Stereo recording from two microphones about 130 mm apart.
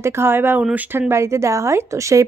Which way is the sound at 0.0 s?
20° right (ahead or behind).